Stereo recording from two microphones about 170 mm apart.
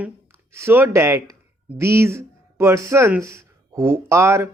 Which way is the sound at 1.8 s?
15° right (ahead or behind).